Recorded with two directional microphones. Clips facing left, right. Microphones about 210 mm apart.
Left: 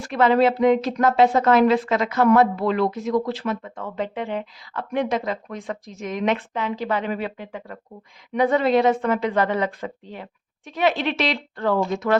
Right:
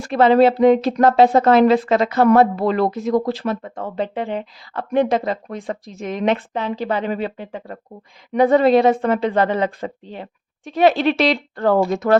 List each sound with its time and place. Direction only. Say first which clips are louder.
0.0 s a woman's voice: right 5 dB; 30° right (ahead or behind)